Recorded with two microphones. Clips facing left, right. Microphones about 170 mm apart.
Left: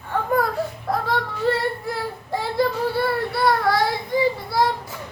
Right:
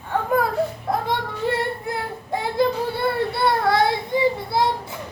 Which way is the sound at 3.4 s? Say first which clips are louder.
Right 1 dB; 25° right (ahead or behind).